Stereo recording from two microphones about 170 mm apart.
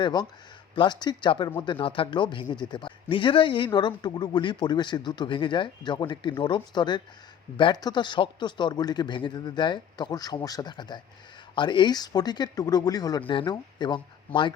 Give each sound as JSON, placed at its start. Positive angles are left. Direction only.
{"t": 0.0, "sound": "speech", "side_deg": 25}